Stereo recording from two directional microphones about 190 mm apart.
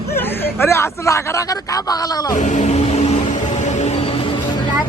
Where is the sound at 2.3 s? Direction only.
40° left (ahead or behind).